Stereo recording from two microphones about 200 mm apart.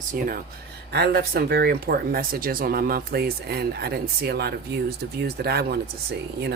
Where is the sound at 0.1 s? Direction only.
45° right (ahead or behind).